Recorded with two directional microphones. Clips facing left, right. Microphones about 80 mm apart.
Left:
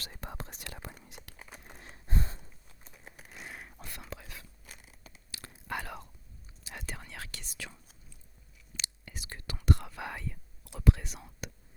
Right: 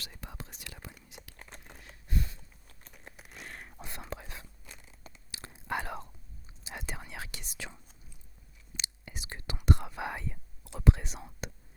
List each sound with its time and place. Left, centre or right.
0.0 s whispering: left
1.4 s crumpling: centre
1.8 s a sound: left
2.9 s a sound: centre
3.8 s whispering: right
4.6 s crunch: centre
5.3 s whispering: right